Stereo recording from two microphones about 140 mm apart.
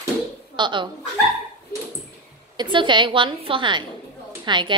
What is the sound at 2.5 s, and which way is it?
A woman's voice, 35° right (ahead or behind).